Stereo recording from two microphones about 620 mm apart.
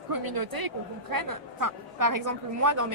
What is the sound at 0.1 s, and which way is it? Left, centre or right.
A woman's voice, right.